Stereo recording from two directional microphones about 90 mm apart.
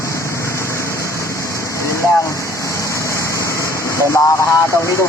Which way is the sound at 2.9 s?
35° left (ahead or behind).